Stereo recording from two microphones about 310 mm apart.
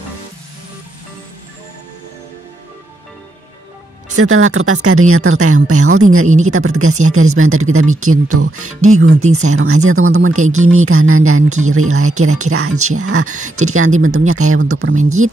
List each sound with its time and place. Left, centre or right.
4.1 s speech: right